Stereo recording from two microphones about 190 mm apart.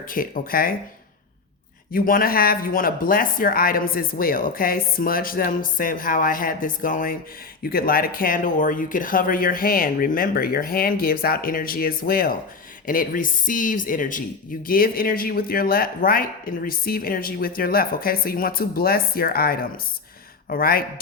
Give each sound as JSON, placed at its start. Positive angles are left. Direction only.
{"t": 0.1, "sound": "speech", "side_deg": 45}
{"t": 1.9, "sound": "speech", "side_deg": 50}